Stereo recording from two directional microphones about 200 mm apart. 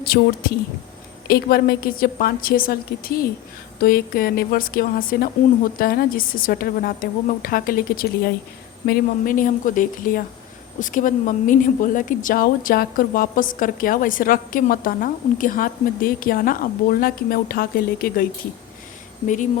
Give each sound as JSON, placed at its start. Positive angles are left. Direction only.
{"t": 0.0, "sound": "a woman's voice", "side_deg": 50}